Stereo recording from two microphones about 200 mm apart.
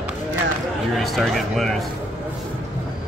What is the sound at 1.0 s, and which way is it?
Speech, centre (ahead or behind).